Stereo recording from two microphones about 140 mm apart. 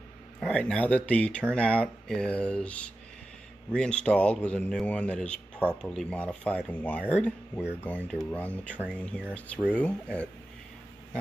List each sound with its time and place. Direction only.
0.4 s a man's voice: 5° left (ahead or behind)